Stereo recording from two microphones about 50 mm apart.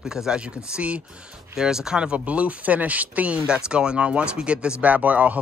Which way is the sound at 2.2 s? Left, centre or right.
Right.